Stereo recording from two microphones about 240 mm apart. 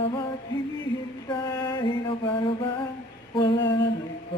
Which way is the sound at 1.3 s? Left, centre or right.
Centre.